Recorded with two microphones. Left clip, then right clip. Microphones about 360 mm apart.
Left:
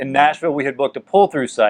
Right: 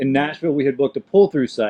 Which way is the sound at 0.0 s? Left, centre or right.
Left.